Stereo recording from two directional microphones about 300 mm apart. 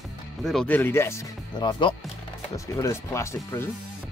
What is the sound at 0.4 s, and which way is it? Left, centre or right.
Speech, centre.